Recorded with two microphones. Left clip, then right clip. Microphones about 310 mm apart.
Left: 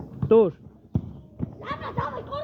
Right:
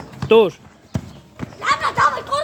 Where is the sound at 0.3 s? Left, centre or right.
Centre.